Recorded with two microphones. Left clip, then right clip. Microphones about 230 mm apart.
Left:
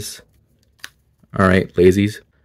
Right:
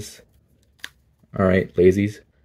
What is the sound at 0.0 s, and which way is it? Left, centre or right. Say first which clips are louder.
Speech: left 7 dB; left.